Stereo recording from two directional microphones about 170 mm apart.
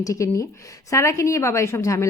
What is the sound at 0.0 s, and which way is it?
A woman's voice, 20° left (ahead or behind).